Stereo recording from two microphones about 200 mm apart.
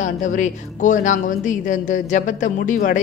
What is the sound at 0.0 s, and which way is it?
A woman's voice, 40° left (ahead or behind).